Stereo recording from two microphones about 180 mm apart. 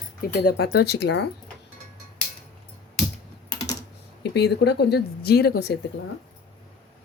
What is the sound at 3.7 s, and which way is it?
Speech, 70° left (ahead or behind).